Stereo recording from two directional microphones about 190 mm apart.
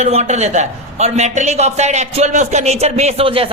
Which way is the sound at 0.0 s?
35° right (ahead or behind).